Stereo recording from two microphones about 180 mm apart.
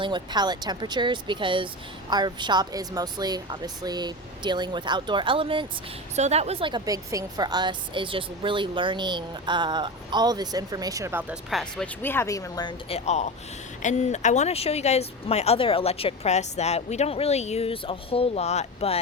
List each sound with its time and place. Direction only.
0.0 s speech: 25° right (ahead or behind); by 11.6 s 10° right (ahead or behind)
11.6 s speech: 10° left (ahead or behind)
12.9 s speech: 40° left (ahead or behind)